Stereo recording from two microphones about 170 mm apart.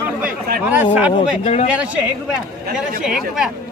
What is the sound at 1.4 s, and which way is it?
Speech, 40° left (ahead or behind).